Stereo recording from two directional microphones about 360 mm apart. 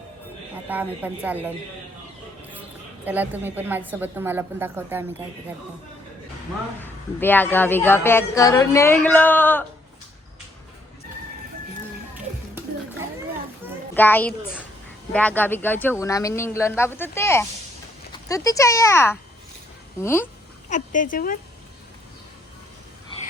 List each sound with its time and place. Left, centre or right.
0.7 s speech: centre
3.1 s speech: centre
6.7 s speech: centre
12.1 s music: centre
13.9 s speech: centre
20.7 s speech: left